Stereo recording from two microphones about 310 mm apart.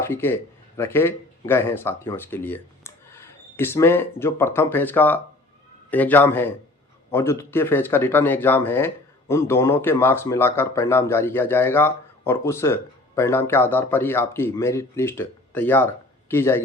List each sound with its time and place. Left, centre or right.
0.0 s speech: centre